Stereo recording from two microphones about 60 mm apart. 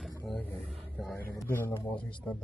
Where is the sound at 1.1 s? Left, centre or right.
Left.